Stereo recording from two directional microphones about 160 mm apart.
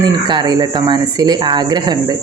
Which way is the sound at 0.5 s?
25° right (ahead or behind).